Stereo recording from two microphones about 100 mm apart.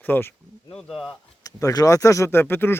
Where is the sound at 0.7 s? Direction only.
Centre (ahead or behind).